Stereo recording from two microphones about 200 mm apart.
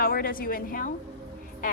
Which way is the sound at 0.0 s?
45° left (ahead or behind).